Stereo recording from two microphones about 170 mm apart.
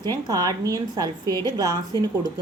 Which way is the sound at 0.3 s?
20° right (ahead or behind).